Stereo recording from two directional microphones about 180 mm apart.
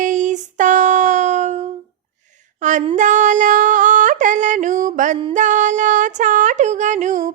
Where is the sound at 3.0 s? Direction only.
45° right (ahead or behind).